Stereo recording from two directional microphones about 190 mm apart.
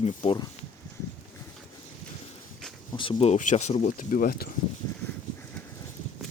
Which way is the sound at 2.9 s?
25° left (ahead or behind).